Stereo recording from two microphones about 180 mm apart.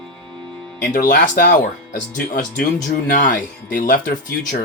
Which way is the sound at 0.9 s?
50° left (ahead or behind).